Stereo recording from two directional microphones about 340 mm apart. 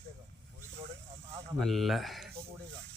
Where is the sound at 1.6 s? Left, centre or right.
Centre.